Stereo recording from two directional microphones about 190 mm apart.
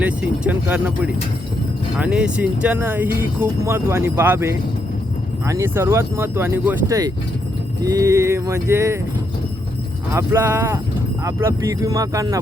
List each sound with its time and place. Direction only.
0.0 s speech: 5° right (ahead or behind)
10.1 s speech: 10° right (ahead or behind)